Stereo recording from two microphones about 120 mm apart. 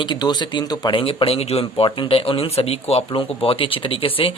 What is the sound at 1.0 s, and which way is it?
Speech, 50° left (ahead or behind).